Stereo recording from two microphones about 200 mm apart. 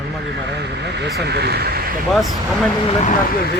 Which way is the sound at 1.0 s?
55° right (ahead or behind).